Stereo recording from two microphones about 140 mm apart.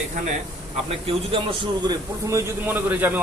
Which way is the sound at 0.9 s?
40° right (ahead or behind).